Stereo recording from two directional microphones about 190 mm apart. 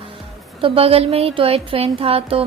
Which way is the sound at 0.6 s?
30° right (ahead or behind).